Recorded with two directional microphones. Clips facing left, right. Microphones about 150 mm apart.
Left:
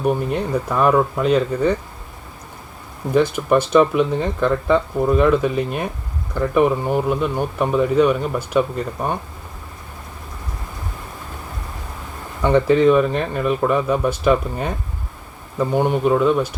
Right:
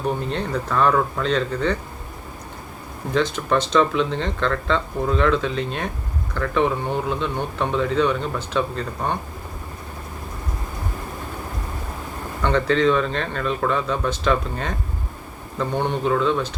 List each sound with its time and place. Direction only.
0.0 s speech: 10° left (ahead or behind)
3.1 s speech: 10° left (ahead or behind)
12.4 s speech: 15° left (ahead or behind)